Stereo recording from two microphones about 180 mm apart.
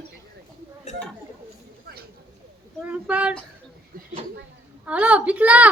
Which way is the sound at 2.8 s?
5° right (ahead or behind).